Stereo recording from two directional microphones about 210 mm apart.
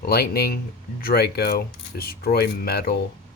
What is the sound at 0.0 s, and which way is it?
Speech, 50° left (ahead or behind).